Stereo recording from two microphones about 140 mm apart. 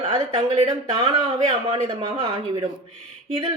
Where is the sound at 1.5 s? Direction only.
40° right (ahead or behind).